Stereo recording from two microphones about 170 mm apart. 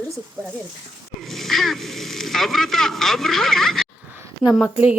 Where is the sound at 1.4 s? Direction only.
Centre (ahead or behind).